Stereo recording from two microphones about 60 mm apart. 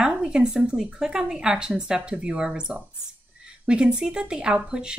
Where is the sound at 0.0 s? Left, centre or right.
Centre.